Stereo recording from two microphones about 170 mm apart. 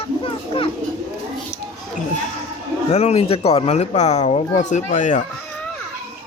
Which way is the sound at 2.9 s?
35° left (ahead or behind).